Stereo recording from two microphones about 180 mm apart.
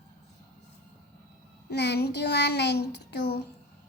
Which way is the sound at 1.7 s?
70° left (ahead or behind).